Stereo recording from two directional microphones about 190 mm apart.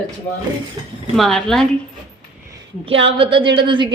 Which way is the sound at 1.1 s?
Centre (ahead or behind).